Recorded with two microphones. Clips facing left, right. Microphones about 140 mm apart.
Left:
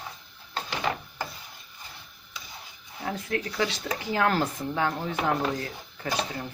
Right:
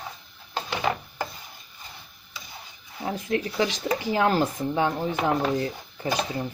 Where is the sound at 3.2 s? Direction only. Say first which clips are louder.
Right 4 dB; 15° right (ahead or behind).